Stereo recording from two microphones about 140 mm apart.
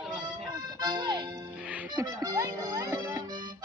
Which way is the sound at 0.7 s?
30° right (ahead or behind).